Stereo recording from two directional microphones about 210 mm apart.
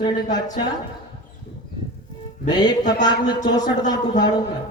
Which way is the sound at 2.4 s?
20° left (ahead or behind).